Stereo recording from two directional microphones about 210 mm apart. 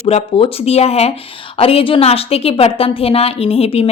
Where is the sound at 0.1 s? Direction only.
25° left (ahead or behind).